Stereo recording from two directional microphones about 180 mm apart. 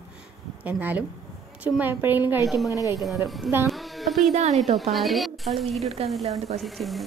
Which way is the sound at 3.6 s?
Centre (ahead or behind).